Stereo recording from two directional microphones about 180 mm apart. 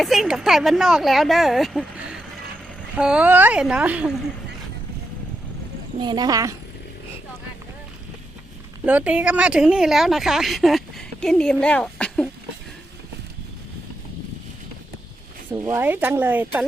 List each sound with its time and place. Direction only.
0.0 s speech: centre (ahead or behind)
6.0 s speech: 25° right (ahead or behind)
8.8 s a woman's voice: 10° right (ahead or behind)
15.4 s speech: 15° right (ahead or behind)